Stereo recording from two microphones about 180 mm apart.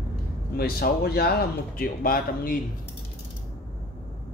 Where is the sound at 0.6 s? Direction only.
60° left (ahead or behind).